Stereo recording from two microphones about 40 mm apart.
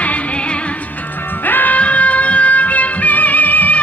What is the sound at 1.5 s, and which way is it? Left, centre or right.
Music, left.